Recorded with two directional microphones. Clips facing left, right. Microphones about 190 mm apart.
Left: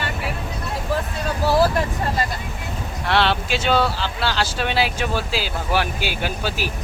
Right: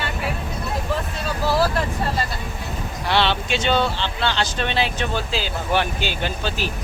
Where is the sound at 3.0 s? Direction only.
Centre (ahead or behind).